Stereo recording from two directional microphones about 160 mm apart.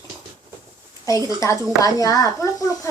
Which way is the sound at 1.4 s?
20° left (ahead or behind).